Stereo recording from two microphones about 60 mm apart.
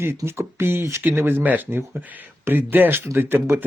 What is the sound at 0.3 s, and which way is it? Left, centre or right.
Speech, right.